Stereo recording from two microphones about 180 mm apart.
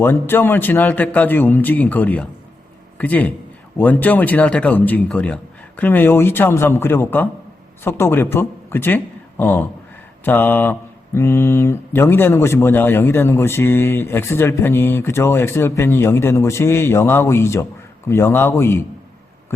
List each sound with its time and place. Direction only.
0.0 s speech: 10° left (ahead or behind)